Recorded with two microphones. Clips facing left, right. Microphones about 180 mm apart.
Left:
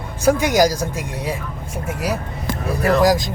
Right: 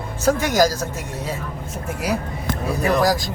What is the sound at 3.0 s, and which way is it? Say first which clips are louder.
Speech: left 3 dB; 20° left (ahead or behind).